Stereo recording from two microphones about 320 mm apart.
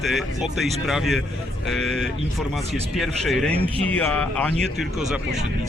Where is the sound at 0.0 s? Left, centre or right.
Centre.